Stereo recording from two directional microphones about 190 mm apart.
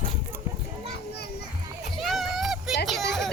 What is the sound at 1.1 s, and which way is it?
Children playing, 60° left (ahead or behind).